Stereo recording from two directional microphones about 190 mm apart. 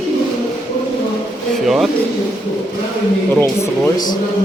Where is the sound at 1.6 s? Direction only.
Centre (ahead or behind).